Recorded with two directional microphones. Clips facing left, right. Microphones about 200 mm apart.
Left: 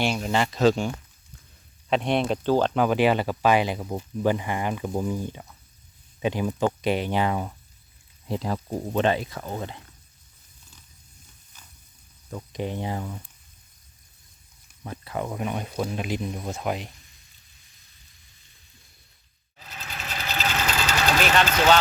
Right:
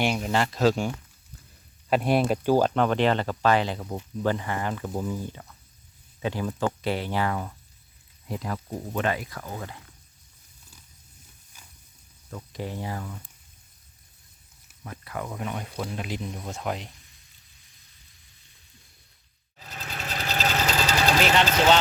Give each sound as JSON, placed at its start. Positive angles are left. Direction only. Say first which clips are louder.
{"t": 0.0, "sound": "speech", "louder": "even", "side_deg": -15}
{"t": 0.3, "sound": "speech", "louder": "left 3 dB", "side_deg": 0}
{"t": 1.9, "sound": "speech", "louder": "right 1 dB", "side_deg": -5}
{"t": 2.7, "sound": "speech", "louder": "left 2 dB", "side_deg": 5}
{"t": 11.5, "sound": "a sound", "louder": "even", "side_deg": -10}
{"t": 12.3, "sound": "speech", "louder": "left 4 dB", "side_deg": 20}
{"t": 14.8, "sound": "speech", "louder": "left 4 dB", "side_deg": 25}
{"t": 20.4, "sound": "vehicle", "louder": "right 1 dB", "side_deg": -35}
{"t": 21.2, "sound": "speech", "louder": "left 1 dB", "side_deg": -20}